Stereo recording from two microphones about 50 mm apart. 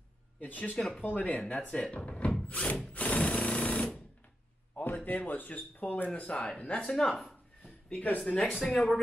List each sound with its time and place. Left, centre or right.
0.4 s speech: left
0.7 s speech: centre
1.0 s speech: left
2.4 s drill: left
4.8 s speech: left; by 7.1 s centre
7.1 s speech: centre
7.6 s a sound: left
8.3 s speech: left